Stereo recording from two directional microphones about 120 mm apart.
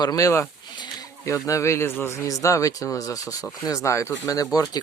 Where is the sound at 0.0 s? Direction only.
30° left (ahead or behind).